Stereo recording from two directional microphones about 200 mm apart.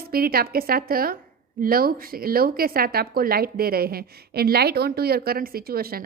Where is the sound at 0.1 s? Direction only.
50° right (ahead or behind).